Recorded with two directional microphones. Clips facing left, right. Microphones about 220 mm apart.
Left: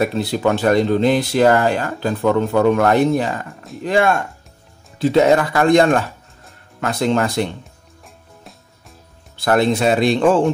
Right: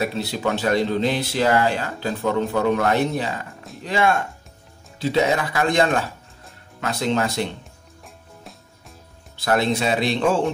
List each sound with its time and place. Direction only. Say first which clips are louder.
0.0 s speech: left 6 dB; 50° left (ahead or behind)
9.4 s speech: left 5 dB; 50° left (ahead or behind)